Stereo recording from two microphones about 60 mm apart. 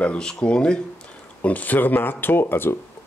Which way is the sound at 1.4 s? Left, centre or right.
Left.